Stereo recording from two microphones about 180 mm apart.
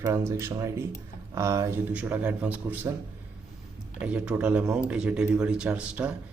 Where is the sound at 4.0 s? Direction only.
5° right (ahead or behind).